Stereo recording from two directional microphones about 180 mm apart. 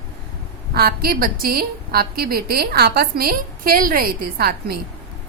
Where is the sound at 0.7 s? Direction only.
55° right (ahead or behind).